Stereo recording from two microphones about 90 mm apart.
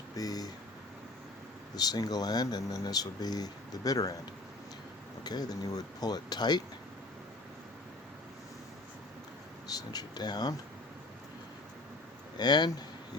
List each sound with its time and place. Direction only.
0.2 s speech: 45° left (ahead or behind)
1.7 s speech: 45° left (ahead or behind)
5.2 s speech: 50° left (ahead or behind)
9.6 s speech: 45° left (ahead or behind)
12.4 s speech: 50° left (ahead or behind)